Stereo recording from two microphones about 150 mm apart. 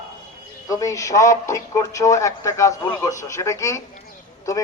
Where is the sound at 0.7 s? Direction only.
20° left (ahead or behind).